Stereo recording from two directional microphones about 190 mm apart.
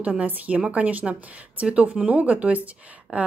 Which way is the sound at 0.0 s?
5° right (ahead or behind).